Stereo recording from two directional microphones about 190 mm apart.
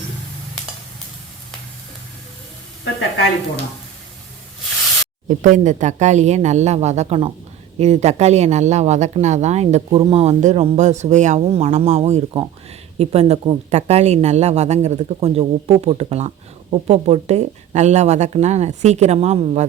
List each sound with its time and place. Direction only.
5.4 s speech: 40° right (ahead or behind)